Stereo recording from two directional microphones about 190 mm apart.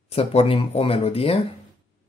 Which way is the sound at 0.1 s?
35° left (ahead or behind).